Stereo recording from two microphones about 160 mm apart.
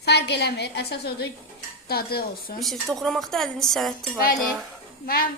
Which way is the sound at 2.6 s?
Centre (ahead or behind).